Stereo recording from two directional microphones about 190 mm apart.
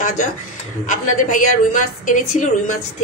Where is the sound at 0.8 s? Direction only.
40° left (ahead or behind).